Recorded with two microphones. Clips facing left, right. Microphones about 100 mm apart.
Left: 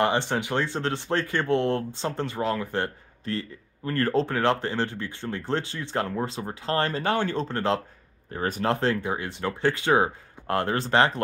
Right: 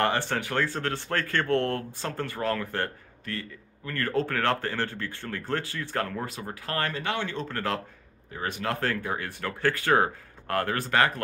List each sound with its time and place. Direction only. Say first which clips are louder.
0.0 s speech: left 2 dB; 20° left (ahead or behind)
8.3 s speech: left 5 dB; 40° left (ahead or behind)
8.7 s speech: left 4 dB; 20° left (ahead or behind)